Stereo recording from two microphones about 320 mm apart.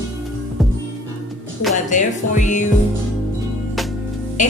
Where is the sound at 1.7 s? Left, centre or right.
Left.